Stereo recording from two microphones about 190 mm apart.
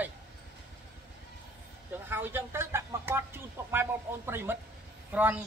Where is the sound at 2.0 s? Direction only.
10° right (ahead or behind).